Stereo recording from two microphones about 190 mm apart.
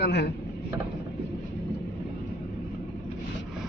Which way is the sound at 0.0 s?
60° left (ahead or behind).